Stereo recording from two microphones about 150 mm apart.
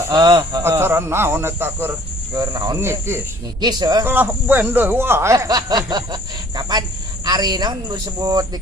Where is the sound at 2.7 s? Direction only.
15° right (ahead or behind).